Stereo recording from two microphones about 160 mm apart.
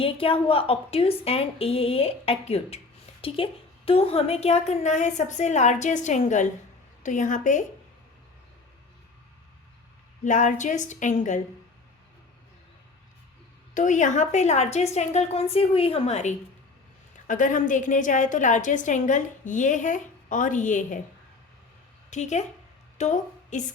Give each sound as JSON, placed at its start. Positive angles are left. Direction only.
{"t": 0.0, "sound": "a woman's voice", "side_deg": 35}
{"t": 10.2, "sound": "a woman's voice", "side_deg": 50}
{"t": 13.7, "sound": "a woman's voice", "side_deg": 50}
{"t": 17.2, "sound": "a woman's voice", "side_deg": 55}
{"t": 22.1, "sound": "a woman's voice", "side_deg": 45}